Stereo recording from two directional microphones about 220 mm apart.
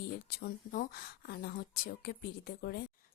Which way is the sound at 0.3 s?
45° left (ahead or behind).